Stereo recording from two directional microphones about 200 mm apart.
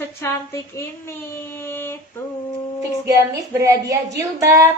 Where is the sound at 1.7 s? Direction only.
10° left (ahead or behind).